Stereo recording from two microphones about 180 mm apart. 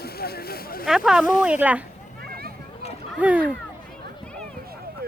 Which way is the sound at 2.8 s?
35° left (ahead or behind).